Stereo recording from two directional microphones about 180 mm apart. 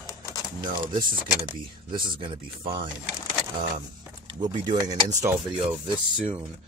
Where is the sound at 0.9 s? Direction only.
25° right (ahead or behind).